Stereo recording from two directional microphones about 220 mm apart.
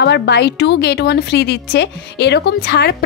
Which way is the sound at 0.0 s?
50° left (ahead or behind).